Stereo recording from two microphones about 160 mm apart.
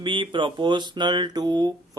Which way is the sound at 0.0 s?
30° right (ahead or behind).